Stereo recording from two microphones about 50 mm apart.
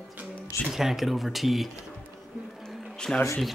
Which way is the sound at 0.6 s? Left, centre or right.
Centre.